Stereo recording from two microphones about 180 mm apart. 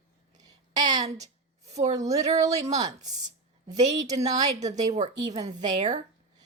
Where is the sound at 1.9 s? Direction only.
20° right (ahead or behind).